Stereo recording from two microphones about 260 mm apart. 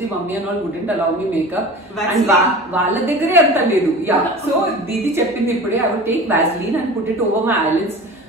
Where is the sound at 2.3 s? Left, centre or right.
Centre.